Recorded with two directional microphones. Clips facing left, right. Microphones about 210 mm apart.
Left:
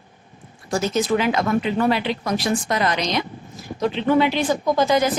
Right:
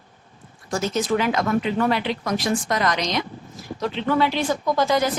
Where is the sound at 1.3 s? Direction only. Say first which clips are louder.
Left 1 dB; 25° left (ahead or behind).